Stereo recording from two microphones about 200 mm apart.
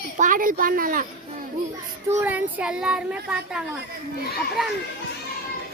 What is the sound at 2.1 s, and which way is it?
Speech, 10° right (ahead or behind).